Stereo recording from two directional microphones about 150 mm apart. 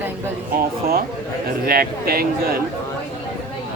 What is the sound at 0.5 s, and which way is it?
Speech, 80° right.